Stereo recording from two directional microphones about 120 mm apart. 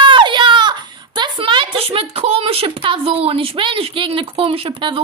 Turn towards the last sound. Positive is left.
turn(degrees=-45)  # may be behind; listen again after turning